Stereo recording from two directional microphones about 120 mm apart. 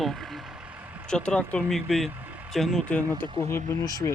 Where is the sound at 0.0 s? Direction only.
Centre (ahead or behind).